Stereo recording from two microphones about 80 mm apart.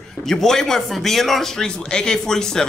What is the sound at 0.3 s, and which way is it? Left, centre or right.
Speech, centre.